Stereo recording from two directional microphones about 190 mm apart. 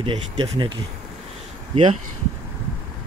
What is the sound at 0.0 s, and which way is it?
Speech, 25° right (ahead or behind).